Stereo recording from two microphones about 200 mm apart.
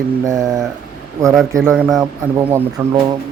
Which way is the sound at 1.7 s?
5° right (ahead or behind).